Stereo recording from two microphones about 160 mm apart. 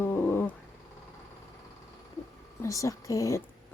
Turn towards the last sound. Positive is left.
turn(degrees=20)  # may be behind; listen again after turning